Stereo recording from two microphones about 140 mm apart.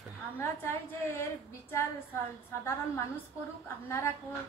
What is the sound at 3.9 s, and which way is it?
Speech, 15° left (ahead or behind).